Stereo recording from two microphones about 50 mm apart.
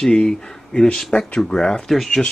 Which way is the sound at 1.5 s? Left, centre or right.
Centre.